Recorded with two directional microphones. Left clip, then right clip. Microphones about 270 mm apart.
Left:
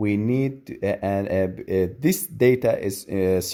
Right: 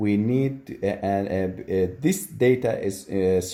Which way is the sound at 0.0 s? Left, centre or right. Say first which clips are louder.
Even; left.